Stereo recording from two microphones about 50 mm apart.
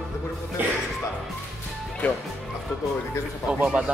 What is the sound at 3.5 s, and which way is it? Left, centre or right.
Speech, right.